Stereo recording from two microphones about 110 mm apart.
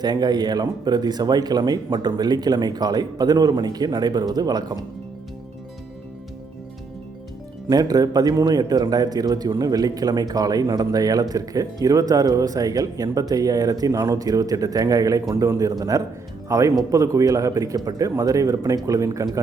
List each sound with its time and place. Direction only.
0.0 s speech: 40° right (ahead or behind)
7.7 s speech: 35° right (ahead or behind)